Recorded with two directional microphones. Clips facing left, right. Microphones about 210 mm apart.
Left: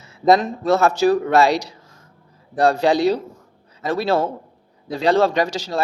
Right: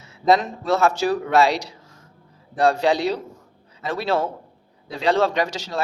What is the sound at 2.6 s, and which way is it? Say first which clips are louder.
A man's voice: left 2 dB; 40° left (ahead or behind).